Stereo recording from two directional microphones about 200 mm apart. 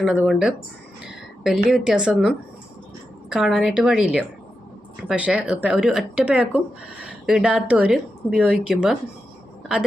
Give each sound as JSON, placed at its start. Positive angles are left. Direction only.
{"t": 0.3, "sound": "speech", "side_deg": -5}